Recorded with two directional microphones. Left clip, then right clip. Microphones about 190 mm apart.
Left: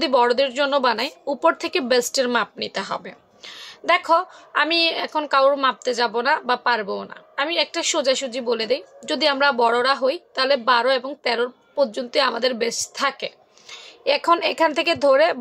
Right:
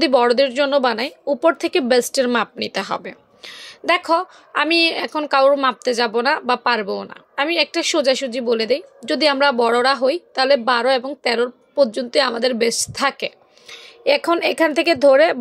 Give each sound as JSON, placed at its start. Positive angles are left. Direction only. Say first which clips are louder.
{"t": 0.0, "sound": "speech", "louder": "right 3 dB", "side_deg": -25}